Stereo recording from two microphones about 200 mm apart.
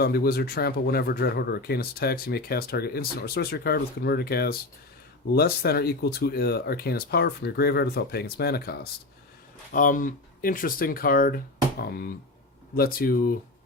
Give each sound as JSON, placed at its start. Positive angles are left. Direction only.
{"t": 0.0, "sound": "speech", "side_deg": 50}